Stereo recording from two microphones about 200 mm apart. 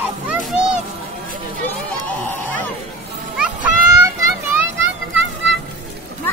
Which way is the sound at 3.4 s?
10° right (ahead or behind).